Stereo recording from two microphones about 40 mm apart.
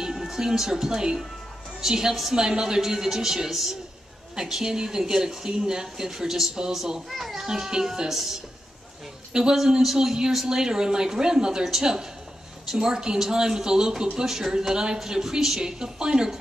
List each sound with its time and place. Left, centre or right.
0.0 s a child's voice: centre
8.1 s speech: centre
9.3 s a man's voice: centre
9.6 s speech: centre